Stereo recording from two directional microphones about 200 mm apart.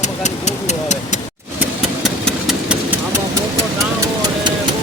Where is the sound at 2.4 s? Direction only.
5° right (ahead or behind).